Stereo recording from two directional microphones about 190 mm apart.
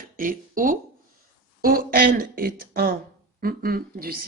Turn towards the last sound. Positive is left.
turn(degrees=-50)  # may be behind; listen again after turning